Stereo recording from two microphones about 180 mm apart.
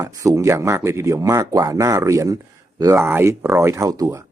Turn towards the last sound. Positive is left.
turn(degrees=-20)  # may be behind; listen again after turning